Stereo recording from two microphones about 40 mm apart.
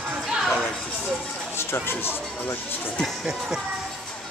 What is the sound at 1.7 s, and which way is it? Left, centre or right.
Speech, left.